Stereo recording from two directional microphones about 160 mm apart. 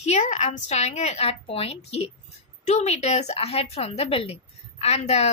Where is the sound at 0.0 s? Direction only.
45° left (ahead or behind).